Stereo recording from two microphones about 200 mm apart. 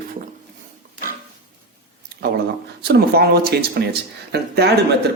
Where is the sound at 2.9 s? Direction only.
50° right (ahead or behind).